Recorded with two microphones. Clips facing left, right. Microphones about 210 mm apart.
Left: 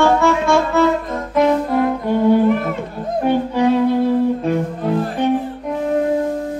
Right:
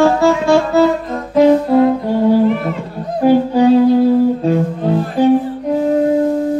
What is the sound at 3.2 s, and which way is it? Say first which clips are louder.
Music: right 6 dB; 30° right (ahead or behind).